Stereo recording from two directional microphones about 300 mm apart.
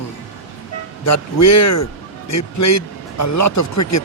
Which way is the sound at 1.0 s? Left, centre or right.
Left.